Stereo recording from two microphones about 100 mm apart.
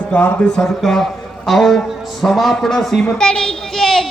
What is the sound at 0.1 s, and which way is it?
A child's voice, 15° left (ahead or behind).